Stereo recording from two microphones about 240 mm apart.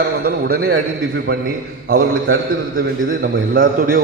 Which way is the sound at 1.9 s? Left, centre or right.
Right.